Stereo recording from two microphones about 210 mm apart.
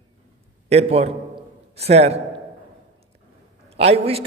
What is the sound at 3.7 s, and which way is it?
Speech, 30° right (ahead or behind).